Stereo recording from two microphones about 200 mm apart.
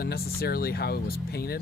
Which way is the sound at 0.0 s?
50° left (ahead or behind).